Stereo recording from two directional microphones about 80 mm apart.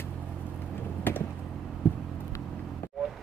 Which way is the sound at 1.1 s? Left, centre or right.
Left.